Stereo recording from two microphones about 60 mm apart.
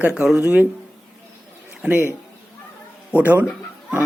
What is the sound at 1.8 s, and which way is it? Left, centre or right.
Speech, right.